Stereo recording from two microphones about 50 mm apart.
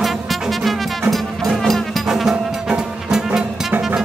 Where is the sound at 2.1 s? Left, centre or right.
Centre.